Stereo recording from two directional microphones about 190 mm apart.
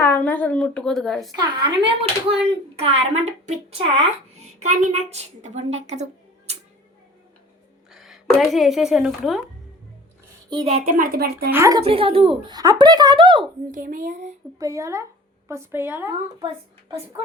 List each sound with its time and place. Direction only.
0.0 s a woman's voice: 10° left (ahead or behind)
1.4 s a child's voice: 25° right (ahead or behind)
6.5 s music: 35° right (ahead or behind)
7.9 s a sound: centre (ahead or behind)
8.4 s a woman's voice: centre (ahead or behind)
10.5 s a woman's voice: 30° right (ahead or behind); by 11.5 s 55° right (ahead or behind)
11.5 s a woman's voice: 15° right (ahead or behind)
11.9 s speech: 30° right (ahead or behind)
13.7 s a woman's voice: 45° right (ahead or behind)
14.6 s a woman's voice: 15° right (ahead or behind)